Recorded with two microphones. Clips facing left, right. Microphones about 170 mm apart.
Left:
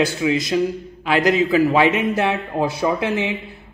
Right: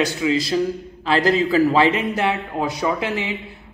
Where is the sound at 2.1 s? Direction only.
25° left (ahead or behind).